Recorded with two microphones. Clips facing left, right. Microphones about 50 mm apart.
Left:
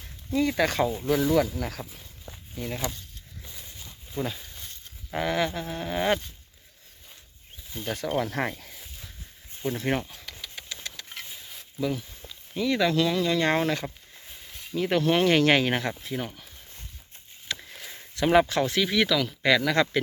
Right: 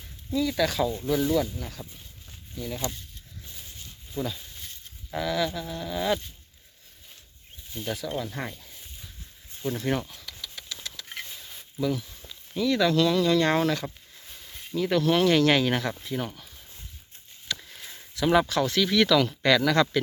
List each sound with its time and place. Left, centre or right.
0.3 s speech: left
1.0 s speech: left
2.2 s walk: left
4.1 s speech: left
7.9 s speech: left
9.5 s speech: left
10.2 s engine: left
11.3 s speech: centre
13.8 s a sound: centre
14.8 s speech: left
16.0 s speech: centre
17.5 s a sound: left
18.1 s speech: left